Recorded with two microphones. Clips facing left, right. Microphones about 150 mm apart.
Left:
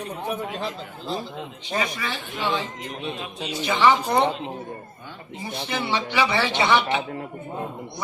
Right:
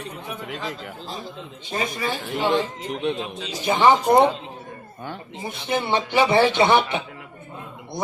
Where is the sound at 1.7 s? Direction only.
45° right (ahead or behind).